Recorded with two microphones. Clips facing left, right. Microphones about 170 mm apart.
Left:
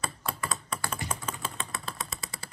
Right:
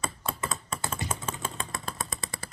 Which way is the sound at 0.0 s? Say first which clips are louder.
Right 1 dB; 25° right (ahead or behind).